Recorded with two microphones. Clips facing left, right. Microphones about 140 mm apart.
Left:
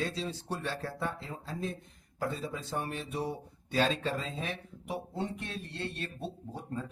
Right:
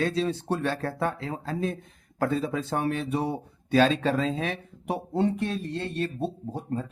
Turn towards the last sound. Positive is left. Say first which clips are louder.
# right 7 dB
turn(degrees=-45)  # may be behind; listen again after turning